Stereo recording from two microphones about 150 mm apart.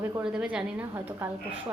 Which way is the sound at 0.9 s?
15° right (ahead or behind).